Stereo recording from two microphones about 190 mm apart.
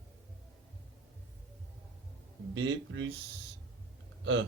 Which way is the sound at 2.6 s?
80° right.